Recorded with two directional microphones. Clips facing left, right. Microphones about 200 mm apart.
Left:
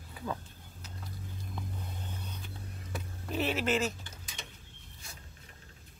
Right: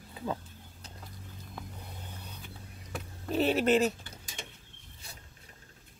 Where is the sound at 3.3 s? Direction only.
35° right (ahead or behind).